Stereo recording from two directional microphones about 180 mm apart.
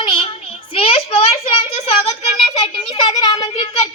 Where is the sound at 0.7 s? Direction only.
30° left (ahead or behind).